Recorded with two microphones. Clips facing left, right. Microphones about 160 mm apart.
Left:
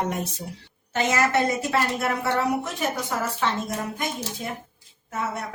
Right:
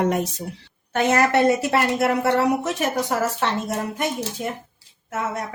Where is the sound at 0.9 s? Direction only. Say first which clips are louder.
Right 4 dB; 60° right (ahead or behind).